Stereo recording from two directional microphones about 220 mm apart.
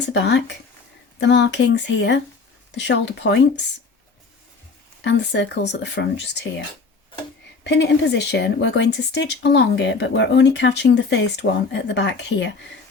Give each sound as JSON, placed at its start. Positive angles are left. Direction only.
{"t": 0.1, "sound": "speech", "side_deg": 50}
{"t": 5.0, "sound": "speech", "side_deg": 50}
{"t": 7.6, "sound": "speech", "side_deg": 55}